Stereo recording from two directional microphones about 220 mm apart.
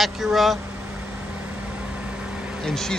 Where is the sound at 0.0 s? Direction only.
Centre (ahead or behind).